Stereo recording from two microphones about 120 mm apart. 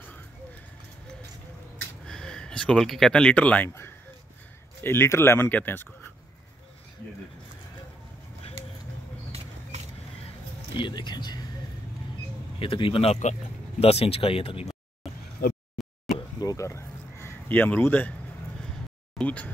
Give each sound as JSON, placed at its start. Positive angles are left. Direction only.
{"t": 2.0, "sound": "speech", "side_deg": 5}
{"t": 10.8, "sound": "speech", "side_deg": 40}
{"t": 12.5, "sound": "speech", "side_deg": 50}
{"t": 15.8, "sound": "a sound", "side_deg": 0}
{"t": 16.3, "sound": "a sound", "side_deg": 30}
{"t": 19.1, "sound": "speech", "side_deg": 10}